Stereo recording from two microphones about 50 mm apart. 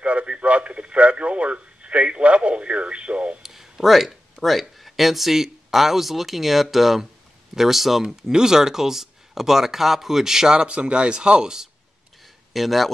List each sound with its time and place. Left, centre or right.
0.0 s radio: right
3.4 s speech: centre
12.5 s speech: centre